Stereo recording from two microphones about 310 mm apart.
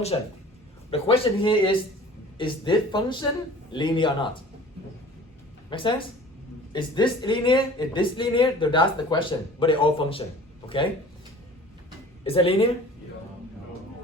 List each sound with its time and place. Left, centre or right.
0.1 s speech: centre
5.7 s speech: centre
12.2 s speech: centre